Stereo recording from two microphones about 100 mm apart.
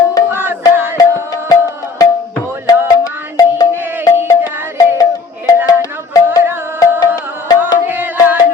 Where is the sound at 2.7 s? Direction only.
40° left (ahead or behind).